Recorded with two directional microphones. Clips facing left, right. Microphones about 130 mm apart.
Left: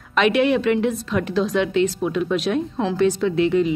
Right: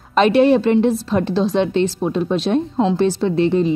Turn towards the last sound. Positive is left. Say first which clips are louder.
# right 2 dB
turn(degrees=-35)  # may be behind; listen again after turning